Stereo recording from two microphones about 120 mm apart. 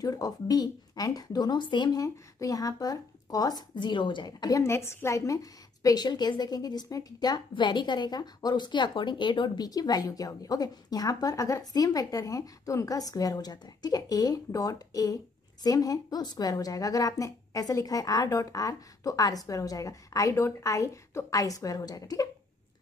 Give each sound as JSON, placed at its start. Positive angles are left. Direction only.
{"t": 0.0, "sound": "a woman's voice", "side_deg": 30}